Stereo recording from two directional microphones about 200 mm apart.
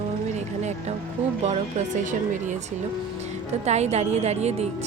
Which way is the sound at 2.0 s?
40° right (ahead or behind).